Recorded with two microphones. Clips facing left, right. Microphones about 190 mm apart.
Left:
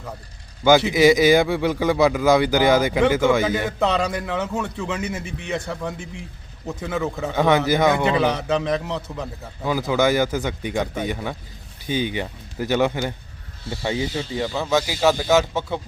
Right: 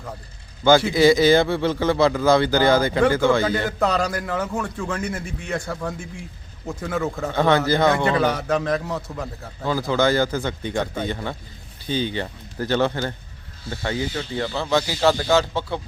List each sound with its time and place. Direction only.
0.6 s a man's voice: 15° left (ahead or behind)
3.7 s a man's voice: centre (ahead or behind); by 7.9 s 15° left (ahead or behind)
7.9 s a man's voice: centre (ahead or behind)
9.6 s a man's voice: 15° left (ahead or behind)